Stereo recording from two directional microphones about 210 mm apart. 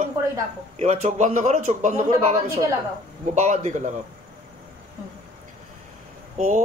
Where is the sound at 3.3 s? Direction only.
35° right (ahead or behind).